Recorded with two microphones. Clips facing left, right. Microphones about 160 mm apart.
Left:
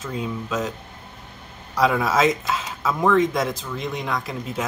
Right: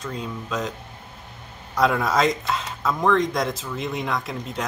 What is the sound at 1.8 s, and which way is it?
Speech, centre (ahead or behind).